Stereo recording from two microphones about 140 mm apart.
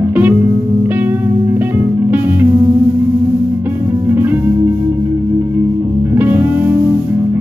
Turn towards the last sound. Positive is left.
turn(degrees=-15)  # may be behind; listen again after turning